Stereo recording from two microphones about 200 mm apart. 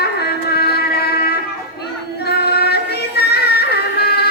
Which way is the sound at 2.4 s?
55° left (ahead or behind).